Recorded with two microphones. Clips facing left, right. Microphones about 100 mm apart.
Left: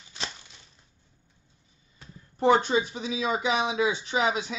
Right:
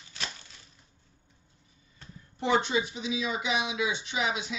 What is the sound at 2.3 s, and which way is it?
Speech, 40° left (ahead or behind).